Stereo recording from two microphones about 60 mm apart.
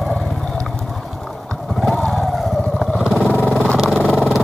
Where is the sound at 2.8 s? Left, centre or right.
Centre.